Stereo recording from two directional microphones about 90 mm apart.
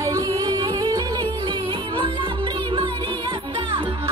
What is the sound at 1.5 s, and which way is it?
Music, 65° right (ahead or behind).